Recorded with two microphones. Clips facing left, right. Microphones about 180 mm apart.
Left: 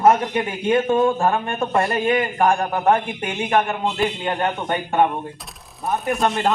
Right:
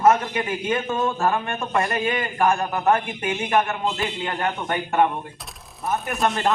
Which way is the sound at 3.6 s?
25° left (ahead or behind).